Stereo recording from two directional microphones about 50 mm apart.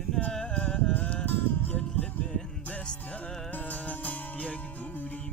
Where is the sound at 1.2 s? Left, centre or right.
Left.